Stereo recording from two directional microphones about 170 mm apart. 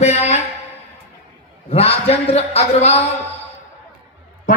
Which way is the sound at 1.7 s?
35° left (ahead or behind).